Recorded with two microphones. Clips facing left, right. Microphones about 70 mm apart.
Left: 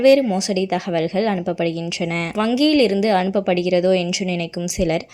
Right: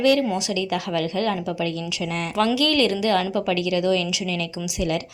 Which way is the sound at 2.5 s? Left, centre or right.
Left.